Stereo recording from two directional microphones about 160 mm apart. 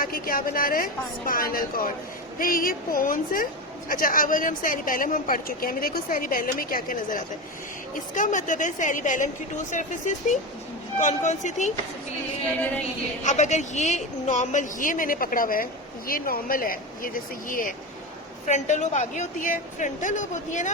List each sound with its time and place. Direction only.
0.0 s a woman's voice: 65° left (ahead or behind); by 11.7 s 50° left (ahead or behind)
12.5 s a sound: 10° left (ahead or behind)
13.2 s speech: 50° left (ahead or behind)
18.4 s a woman's voice: 45° left (ahead or behind)